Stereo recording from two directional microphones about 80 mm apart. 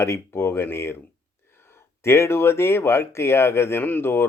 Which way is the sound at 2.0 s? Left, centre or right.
Left.